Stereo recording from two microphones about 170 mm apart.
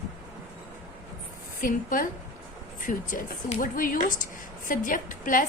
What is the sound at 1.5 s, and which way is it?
Speech, 55° left (ahead or behind).